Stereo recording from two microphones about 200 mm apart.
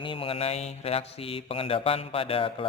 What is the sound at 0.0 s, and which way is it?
Mantra, 25° left (ahead or behind).